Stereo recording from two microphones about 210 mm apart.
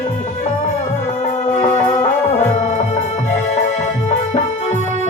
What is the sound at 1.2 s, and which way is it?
Music, 35° left (ahead or behind).